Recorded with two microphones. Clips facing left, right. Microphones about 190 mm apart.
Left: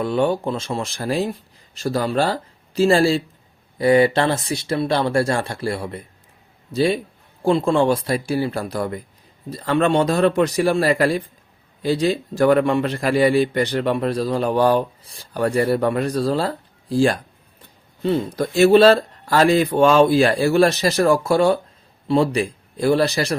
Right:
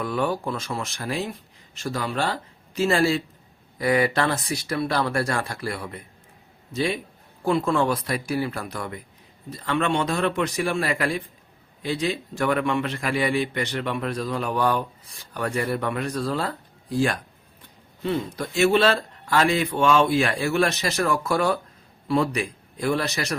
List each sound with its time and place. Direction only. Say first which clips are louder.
0.0 s a man's voice: left 6 dB; 25° left (ahead or behind)